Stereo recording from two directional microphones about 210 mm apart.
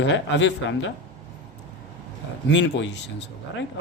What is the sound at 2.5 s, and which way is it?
Speech, 60° left (ahead or behind).